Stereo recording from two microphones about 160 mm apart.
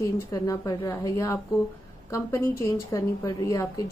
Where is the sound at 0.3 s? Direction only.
20° left (ahead or behind).